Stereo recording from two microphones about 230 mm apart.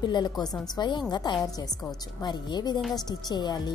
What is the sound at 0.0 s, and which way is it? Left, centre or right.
A woman's voice, centre.